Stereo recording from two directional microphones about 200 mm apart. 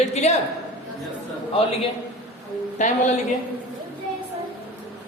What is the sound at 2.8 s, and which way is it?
Speech, 40° left (ahead or behind).